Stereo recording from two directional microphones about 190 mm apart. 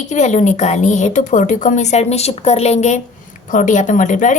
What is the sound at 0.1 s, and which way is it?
A woman's voice, 40° left (ahead or behind).